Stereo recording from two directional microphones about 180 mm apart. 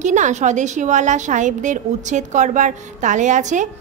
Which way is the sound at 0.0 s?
40° right (ahead or behind).